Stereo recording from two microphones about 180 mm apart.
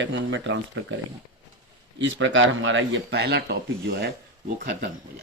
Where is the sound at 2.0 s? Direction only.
90° right; by 3.5 s 65° right (ahead or behind).